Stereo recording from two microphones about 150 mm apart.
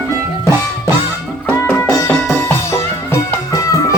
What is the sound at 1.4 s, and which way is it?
Music, 15° left (ahead or behind).